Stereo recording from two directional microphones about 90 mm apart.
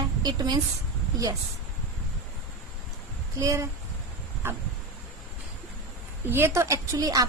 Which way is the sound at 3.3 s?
40° right (ahead or behind).